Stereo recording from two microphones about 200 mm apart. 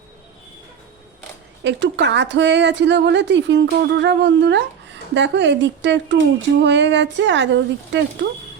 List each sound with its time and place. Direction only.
1.6 s speech: 60° right (ahead or behind)